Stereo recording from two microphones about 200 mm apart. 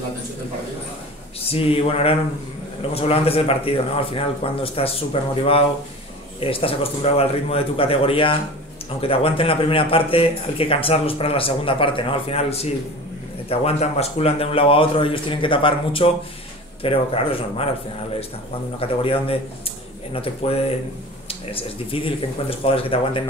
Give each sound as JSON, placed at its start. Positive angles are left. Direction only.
{"t": 1.4, "sound": "a man's voice", "side_deg": 30}
{"t": 6.4, "sound": "a man's voice", "side_deg": 30}
{"t": 18.8, "sound": "a man's voice", "side_deg": 30}